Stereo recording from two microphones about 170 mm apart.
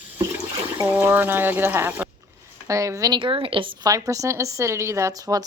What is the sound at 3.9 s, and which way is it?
Speech, 20° right (ahead or behind).